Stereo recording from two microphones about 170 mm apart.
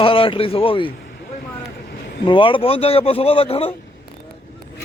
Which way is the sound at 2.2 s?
30° left (ahead or behind).